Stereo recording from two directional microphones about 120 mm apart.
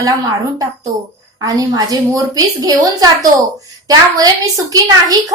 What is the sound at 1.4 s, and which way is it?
A woman's voice, 30° right (ahead or behind).